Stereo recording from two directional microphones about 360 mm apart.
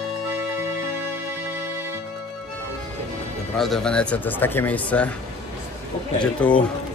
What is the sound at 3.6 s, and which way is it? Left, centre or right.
Speech, centre.